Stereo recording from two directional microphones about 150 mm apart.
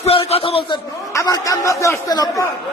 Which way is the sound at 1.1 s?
20° left (ahead or behind).